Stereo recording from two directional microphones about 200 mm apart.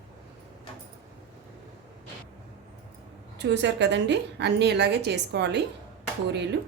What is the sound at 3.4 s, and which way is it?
A woman's voice, 60° right (ahead or behind).